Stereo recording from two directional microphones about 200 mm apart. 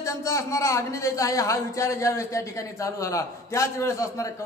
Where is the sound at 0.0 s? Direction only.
15° left (ahead or behind).